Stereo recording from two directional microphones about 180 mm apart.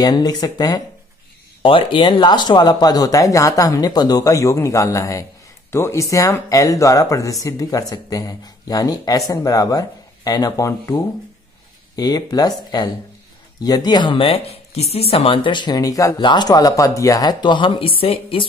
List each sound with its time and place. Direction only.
0.0 s speech: 20° left (ahead or behind)